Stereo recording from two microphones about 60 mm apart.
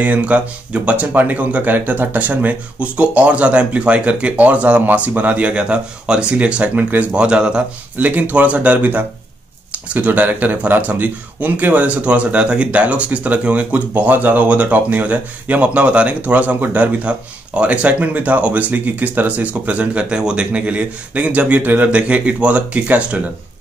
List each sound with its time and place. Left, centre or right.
0.0 s speech: right
8.1 s speech: right